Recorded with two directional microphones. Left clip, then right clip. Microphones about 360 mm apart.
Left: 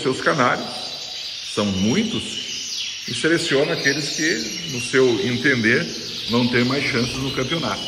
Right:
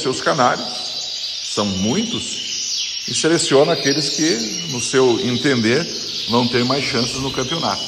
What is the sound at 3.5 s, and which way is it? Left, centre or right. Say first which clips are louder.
Speech: right 4 dB; right.